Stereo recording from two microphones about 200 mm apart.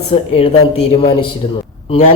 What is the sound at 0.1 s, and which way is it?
A man's voice, 30° left (ahead or behind).